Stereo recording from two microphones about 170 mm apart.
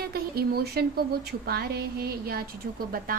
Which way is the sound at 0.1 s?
65° right (ahead or behind).